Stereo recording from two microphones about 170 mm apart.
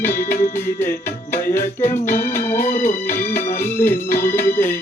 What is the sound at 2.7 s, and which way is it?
Music, 50° left (ahead or behind).